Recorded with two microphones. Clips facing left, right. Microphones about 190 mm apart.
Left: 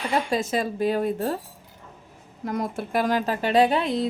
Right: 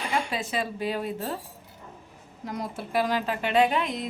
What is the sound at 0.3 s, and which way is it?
Speech, 40° left (ahead or behind).